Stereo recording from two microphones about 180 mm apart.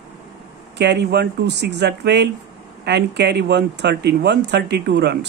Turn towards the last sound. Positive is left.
turn(degrees=-65)  # may be behind; listen again after turning